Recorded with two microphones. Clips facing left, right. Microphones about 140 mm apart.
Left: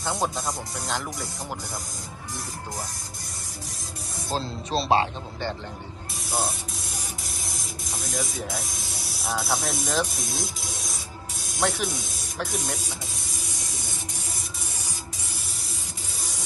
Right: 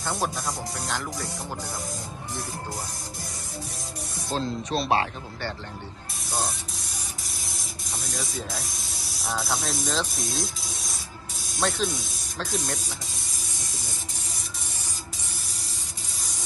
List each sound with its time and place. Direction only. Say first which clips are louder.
0.0 s speech: left 1 dB; 20° left (ahead or behind)
4.4 s speech: right 1 dB; 30° left (ahead or behind)
6.3 s spray: left 2 dB; centre (ahead or behind)
8.4 s speech: left 2 dB; centre (ahead or behind)
10.4 s spray: left 1 dB; centre (ahead or behind)
11.9 s speech: even; centre (ahead or behind)